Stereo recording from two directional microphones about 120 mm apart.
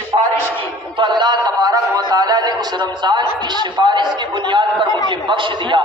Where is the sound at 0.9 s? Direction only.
40° right (ahead or behind).